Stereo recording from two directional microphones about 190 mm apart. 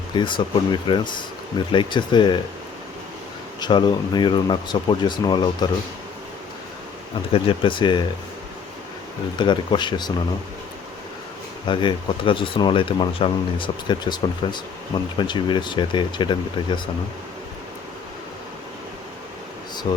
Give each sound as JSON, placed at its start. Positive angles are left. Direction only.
{"t": 0.1, "sound": "speech", "side_deg": 25}
{"t": 3.6, "sound": "speech", "side_deg": 25}
{"t": 7.3, "sound": "speech", "side_deg": 25}
{"t": 9.4, "sound": "speech", "side_deg": 25}
{"t": 11.6, "sound": "speech", "side_deg": 25}
{"t": 19.9, "sound": "speech", "side_deg": 20}